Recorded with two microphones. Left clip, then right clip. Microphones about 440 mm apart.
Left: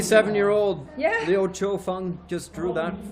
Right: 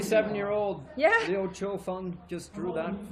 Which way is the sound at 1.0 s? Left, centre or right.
Right.